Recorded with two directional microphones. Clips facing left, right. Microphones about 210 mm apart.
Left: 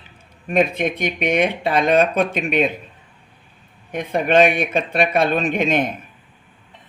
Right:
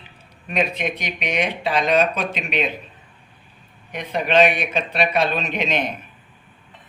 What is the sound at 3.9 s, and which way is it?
Speech, 50° left (ahead or behind).